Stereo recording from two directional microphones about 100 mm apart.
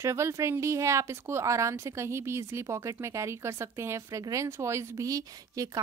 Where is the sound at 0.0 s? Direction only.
30° right (ahead or behind).